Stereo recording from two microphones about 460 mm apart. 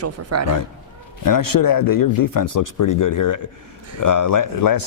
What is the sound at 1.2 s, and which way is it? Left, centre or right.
A man's voice, left.